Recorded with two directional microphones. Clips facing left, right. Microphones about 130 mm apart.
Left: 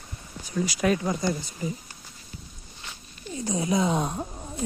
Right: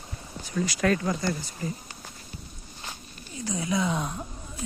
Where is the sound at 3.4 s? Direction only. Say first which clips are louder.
Left 3 dB; 25° left (ahead or behind).